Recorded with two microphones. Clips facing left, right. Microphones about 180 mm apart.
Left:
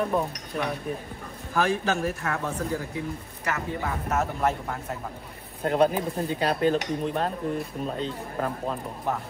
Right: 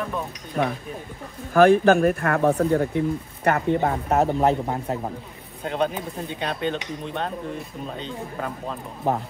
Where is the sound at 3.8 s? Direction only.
35° right (ahead or behind).